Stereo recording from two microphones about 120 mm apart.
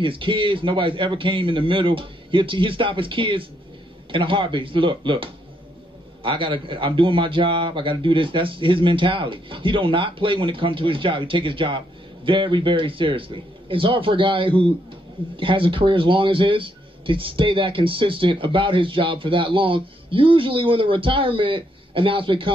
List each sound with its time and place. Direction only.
0.0 s a man's voice: 45° right (ahead or behind)